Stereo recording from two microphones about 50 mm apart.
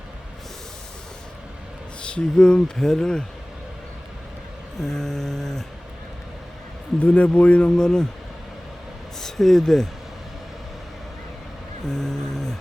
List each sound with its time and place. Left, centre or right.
2.0 s speech: centre
4.8 s speech: centre
7.0 s speech: left
7.8 s speech: centre
9.2 s speech: centre
11.9 s a sound: centre